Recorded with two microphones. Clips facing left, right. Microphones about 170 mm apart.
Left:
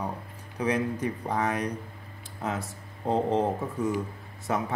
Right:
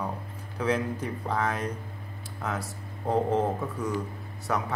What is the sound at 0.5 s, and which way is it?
A man's voice, 15° left (ahead or behind).